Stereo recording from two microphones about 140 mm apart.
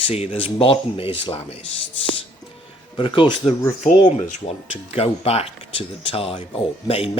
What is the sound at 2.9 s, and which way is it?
Speech, 35° left (ahead or behind).